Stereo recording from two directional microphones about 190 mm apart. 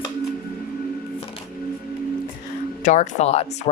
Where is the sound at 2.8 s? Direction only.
40° left (ahead or behind).